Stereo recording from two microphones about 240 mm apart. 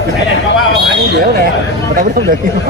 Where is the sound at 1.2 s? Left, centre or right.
Right.